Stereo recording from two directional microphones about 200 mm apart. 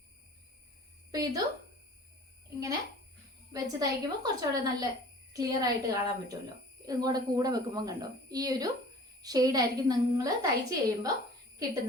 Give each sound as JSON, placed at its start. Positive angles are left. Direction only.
{"t": 1.1, "sound": "speech", "side_deg": -20}
{"t": 3.5, "sound": "a woman's voice", "side_deg": -20}